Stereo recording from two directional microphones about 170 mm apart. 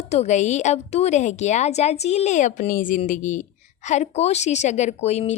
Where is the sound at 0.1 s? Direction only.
40° left (ahead or behind).